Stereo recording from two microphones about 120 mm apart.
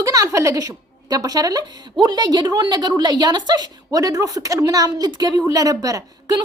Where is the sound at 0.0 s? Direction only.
25° right (ahead or behind).